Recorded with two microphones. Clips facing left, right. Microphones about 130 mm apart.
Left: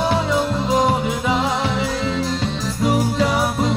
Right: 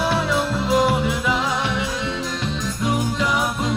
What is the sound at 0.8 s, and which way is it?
Music, 35° left (ahead or behind).